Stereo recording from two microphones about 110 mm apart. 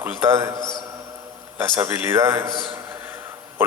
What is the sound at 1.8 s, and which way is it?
Speech, 20° right (ahead or behind).